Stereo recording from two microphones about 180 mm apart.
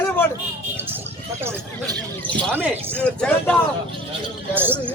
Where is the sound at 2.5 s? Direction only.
10° right (ahead or behind).